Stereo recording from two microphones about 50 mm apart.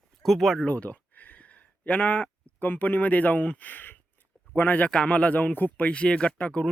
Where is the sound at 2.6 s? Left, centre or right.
Left.